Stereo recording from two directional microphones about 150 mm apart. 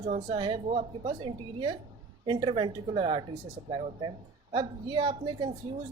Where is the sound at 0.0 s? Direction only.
55° right (ahead or behind).